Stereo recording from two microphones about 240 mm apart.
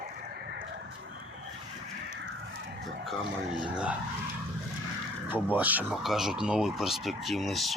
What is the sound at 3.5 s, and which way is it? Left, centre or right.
Speech, centre.